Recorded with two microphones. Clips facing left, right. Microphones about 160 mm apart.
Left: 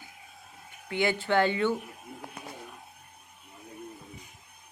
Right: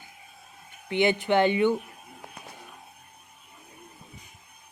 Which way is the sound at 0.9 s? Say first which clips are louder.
Right 4 dB; 20° right (ahead or behind).